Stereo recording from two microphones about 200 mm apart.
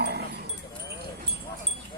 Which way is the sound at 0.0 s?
55° right (ahead or behind).